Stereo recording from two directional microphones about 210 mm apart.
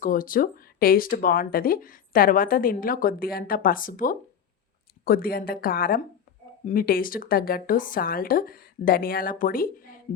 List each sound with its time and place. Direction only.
0.0 s speech: 40° left (ahead or behind)